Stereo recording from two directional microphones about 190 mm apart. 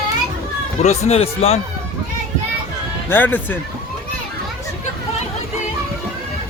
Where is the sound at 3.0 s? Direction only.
10° left (ahead or behind).